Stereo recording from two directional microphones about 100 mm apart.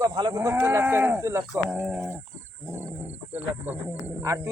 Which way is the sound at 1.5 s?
15° right (ahead or behind).